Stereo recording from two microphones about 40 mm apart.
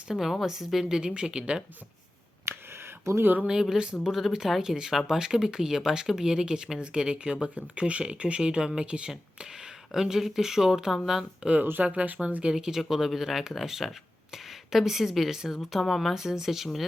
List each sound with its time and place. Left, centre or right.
0.1 s speech: centre
1.0 s speech: right
3.4 s speech: centre
9.9 s speech: centre
11.8 s speech: right
12.4 s speech: centre
12.8 s speech: centre
16.1 s speech: centre